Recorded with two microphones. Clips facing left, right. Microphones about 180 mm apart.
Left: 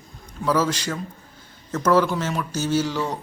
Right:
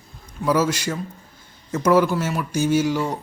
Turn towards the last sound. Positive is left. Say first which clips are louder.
# right 3 dB
turn(degrees=-10)  # may be behind; listen again after turning